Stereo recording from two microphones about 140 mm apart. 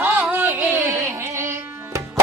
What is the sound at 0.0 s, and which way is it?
Music, 15° right (ahead or behind).